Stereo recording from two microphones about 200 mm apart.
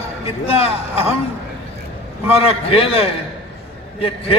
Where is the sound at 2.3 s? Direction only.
30° left (ahead or behind).